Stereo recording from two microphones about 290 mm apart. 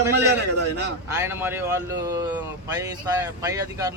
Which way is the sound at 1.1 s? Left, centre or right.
Centre.